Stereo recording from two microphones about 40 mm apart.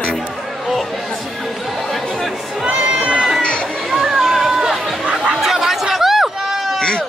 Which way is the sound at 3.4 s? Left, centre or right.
Left.